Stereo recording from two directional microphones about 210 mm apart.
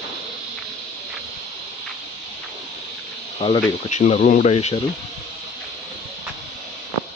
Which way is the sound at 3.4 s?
30° left (ahead or behind).